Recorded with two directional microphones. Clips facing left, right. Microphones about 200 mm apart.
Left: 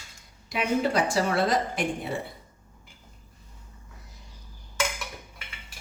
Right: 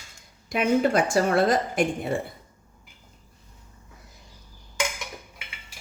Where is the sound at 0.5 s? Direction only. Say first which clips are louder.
Right 4 dB; 50° right (ahead or behind).